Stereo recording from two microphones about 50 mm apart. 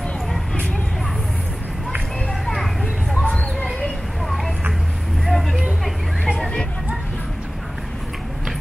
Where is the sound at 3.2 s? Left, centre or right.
Centre.